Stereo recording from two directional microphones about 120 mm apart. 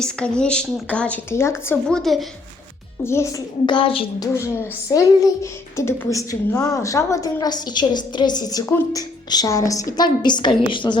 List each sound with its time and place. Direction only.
0.0 s speech: 10° left (ahead or behind)
1.3 s a woman's voice: 20° left (ahead or behind)
1.9 s a woman's voice: centre (ahead or behind)
3.0 s a woman's voice: 20° left (ahead or behind)
3.7 s a woman's voice: 45° left (ahead or behind)
4.2 s a woman's voice: 25° left (ahead or behind); by 10.9 s 40° left (ahead or behind)